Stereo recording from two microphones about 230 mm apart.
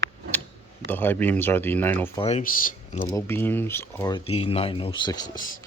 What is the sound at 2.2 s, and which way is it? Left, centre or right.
Speech, left.